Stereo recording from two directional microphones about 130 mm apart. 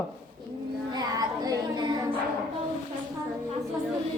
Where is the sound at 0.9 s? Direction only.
30° right (ahead or behind).